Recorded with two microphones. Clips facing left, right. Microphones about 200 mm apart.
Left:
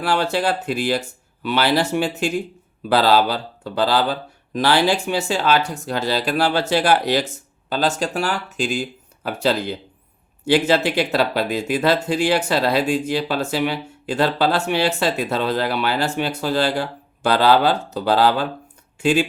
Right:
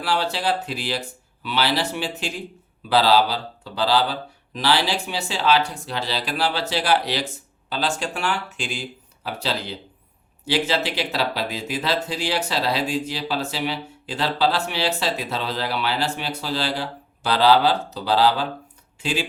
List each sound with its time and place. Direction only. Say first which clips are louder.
0.0 s speech: left 4 dB; 50° left (ahead or behind)